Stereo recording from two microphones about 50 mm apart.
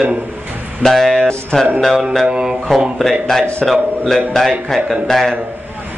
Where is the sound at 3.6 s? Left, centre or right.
Centre.